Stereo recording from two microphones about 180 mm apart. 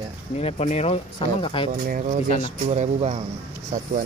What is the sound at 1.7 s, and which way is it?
Speech, 55° right (ahead or behind).